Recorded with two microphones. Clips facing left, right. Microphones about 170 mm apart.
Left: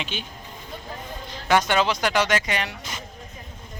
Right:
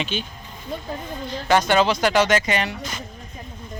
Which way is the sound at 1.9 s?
15° left (ahead or behind).